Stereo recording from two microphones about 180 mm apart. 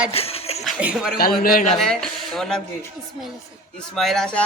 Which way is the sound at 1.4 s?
50° left (ahead or behind).